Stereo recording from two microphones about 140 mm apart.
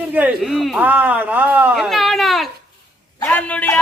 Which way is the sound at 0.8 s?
10° right (ahead or behind).